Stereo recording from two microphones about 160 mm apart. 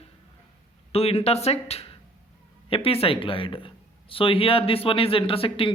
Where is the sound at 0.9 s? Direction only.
40° left (ahead or behind).